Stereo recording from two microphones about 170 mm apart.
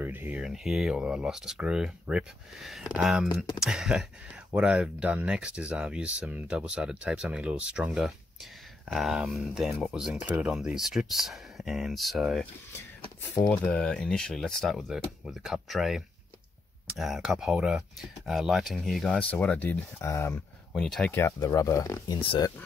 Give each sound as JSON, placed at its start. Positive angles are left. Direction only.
{"t": 0.0, "sound": "speech", "side_deg": -10}
{"t": 13.2, "sound": "speech", "side_deg": 10}
{"t": 21.2, "sound": "speech", "side_deg": 20}